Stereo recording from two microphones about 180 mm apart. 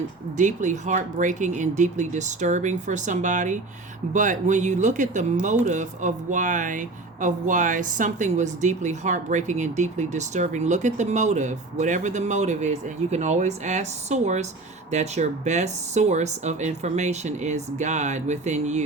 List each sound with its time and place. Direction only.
0.3 s speech: 45° right (ahead or behind)